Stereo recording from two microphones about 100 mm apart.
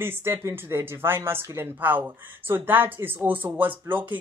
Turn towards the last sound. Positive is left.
turn(degrees=-20)  # may be behind; listen again after turning